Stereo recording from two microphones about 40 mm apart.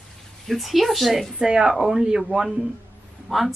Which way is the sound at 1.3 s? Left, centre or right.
Right.